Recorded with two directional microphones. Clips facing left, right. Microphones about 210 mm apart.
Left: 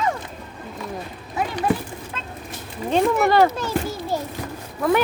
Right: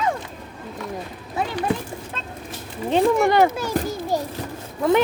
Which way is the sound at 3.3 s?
15° right (ahead or behind).